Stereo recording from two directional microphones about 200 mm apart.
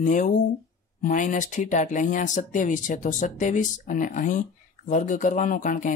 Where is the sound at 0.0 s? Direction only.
40° left (ahead or behind).